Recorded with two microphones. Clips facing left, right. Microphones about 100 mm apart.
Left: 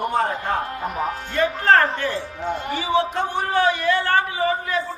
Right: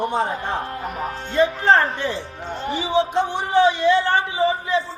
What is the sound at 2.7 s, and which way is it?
A man's voice, 20° right (ahead or behind).